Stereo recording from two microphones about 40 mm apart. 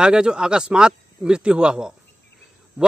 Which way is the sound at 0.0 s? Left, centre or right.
Right.